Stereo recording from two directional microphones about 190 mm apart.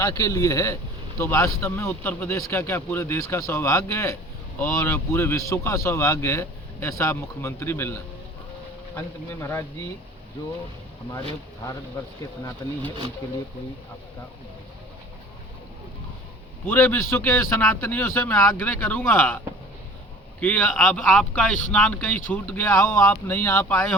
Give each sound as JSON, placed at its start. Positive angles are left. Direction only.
{"t": 0.0, "sound": "speech", "side_deg": 15}
{"t": 12.6, "sound": "speech", "side_deg": 20}
{"t": 16.6, "sound": "speech", "side_deg": 10}
{"t": 20.4, "sound": "speech", "side_deg": 10}